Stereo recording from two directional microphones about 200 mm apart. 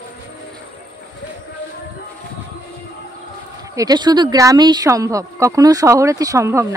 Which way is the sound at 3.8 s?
20° right (ahead or behind).